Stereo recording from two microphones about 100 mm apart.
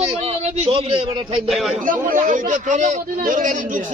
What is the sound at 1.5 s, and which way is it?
Speech, centre (ahead or behind).